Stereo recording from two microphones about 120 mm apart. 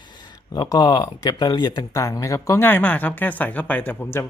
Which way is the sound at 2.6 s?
15° left (ahead or behind).